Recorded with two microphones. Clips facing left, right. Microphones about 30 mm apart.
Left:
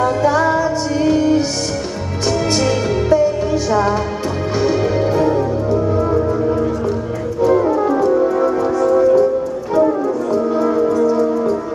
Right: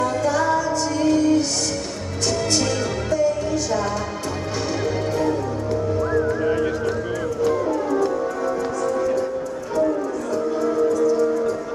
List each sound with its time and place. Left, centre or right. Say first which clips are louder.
0.0 s music: left 6 dB; centre
7.4 s music: left 8 dB; left